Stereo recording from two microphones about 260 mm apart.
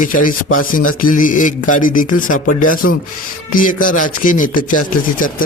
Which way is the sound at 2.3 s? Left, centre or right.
Left.